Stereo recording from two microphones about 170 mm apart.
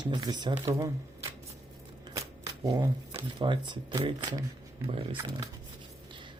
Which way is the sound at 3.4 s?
30° right (ahead or behind).